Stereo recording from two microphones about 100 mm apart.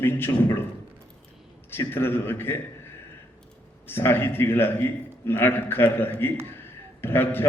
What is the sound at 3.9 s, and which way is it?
A man's voice, 20° left (ahead or behind).